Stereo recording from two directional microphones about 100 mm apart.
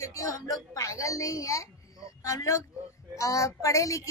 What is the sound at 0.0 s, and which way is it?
A woman's voice, 35° left (ahead or behind).